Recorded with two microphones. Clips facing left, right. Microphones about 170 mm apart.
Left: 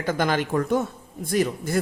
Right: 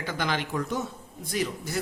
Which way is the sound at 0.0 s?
45° left (ahead or behind).